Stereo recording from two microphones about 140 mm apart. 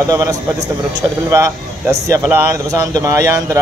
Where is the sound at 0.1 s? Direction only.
25° right (ahead or behind).